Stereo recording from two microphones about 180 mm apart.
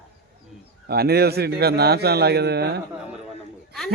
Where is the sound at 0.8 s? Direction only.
60° right (ahead or behind).